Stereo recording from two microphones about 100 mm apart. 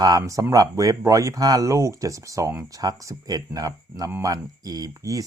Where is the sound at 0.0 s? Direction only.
35° right (ahead or behind).